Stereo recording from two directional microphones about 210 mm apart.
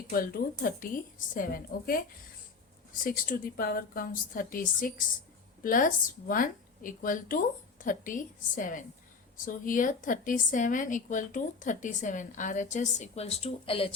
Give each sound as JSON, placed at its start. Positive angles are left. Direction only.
{"t": 0.1, "sound": "a woman's voice", "side_deg": 45}
{"t": 3.0, "sound": "a woman's voice", "side_deg": 40}